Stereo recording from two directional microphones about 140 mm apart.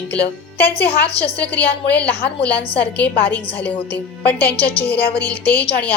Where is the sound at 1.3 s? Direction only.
10° left (ahead or behind).